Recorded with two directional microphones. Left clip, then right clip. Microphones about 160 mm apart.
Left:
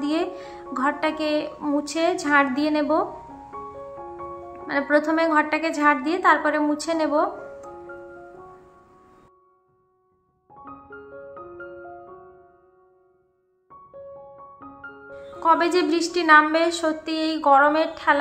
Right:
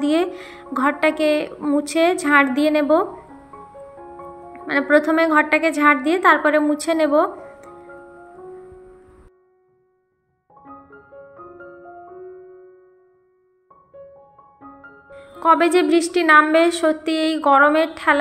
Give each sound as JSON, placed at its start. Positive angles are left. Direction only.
{"t": 0.0, "sound": "speech", "side_deg": -20}
{"t": 4.6, "sound": "speech", "side_deg": -20}
{"t": 15.4, "sound": "speech", "side_deg": -20}